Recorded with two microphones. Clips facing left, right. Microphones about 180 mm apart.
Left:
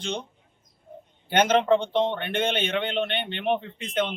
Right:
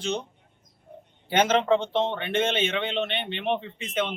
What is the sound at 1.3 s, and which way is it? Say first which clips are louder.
Speech: left 1 dB; 5° right (ahead or behind).